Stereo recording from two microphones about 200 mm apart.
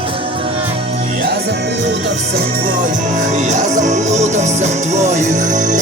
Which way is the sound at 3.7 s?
35° right (ahead or behind).